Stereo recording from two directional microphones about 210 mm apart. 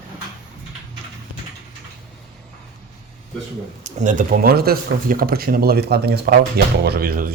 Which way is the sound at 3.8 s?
35° right (ahead or behind).